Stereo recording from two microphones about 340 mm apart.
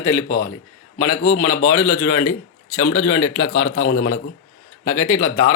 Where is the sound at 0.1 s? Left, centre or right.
Left.